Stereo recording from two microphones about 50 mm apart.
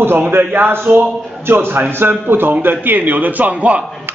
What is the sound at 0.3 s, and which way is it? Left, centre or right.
A man's voice, right.